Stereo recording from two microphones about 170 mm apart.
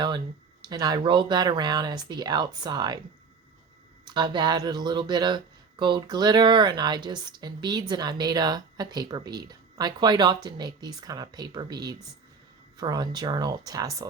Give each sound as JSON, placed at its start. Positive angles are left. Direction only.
{"t": 0.7, "sound": "speech", "side_deg": -25}
{"t": 4.0, "sound": "speech", "side_deg": -25}